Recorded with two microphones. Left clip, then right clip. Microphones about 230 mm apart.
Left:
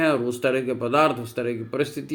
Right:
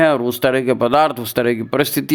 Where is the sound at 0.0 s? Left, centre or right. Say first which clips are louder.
Right 7 dB; right.